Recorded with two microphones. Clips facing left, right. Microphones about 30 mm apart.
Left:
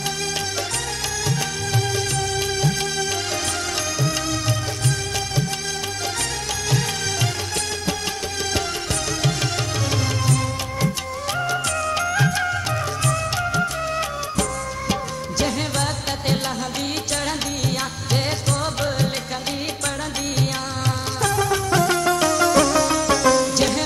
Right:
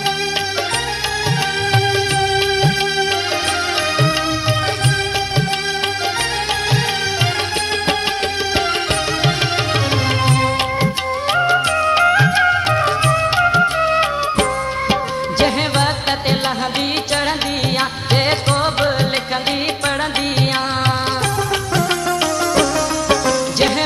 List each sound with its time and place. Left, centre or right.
1.7 s music: right
10.2 s music: right
17.7 s music: right